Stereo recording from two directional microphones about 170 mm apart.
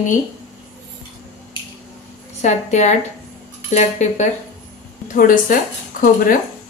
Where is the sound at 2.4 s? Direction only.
45° left (ahead or behind).